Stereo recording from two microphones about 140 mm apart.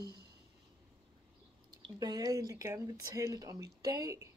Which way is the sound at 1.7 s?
30° right (ahead or behind).